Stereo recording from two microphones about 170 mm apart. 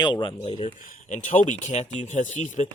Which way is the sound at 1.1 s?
45° left (ahead or behind).